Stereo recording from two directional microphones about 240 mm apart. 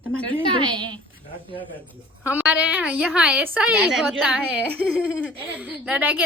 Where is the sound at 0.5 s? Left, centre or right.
Centre.